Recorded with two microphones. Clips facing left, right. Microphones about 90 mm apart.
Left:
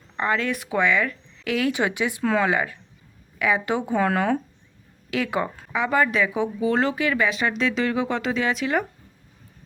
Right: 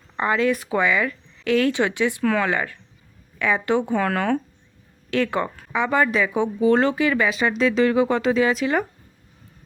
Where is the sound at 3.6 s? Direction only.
15° left (ahead or behind).